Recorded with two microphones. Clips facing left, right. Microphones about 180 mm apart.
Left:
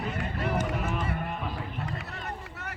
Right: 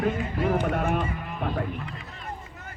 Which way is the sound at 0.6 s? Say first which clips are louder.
Right 6 dB; 65° right (ahead or behind).